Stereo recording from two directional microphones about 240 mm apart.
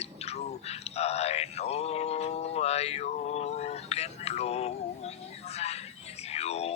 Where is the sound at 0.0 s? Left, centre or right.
Left.